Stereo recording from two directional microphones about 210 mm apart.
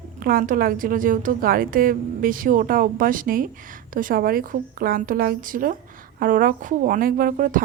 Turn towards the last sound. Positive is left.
turn(degrees=-40)  # may be behind; listen again after turning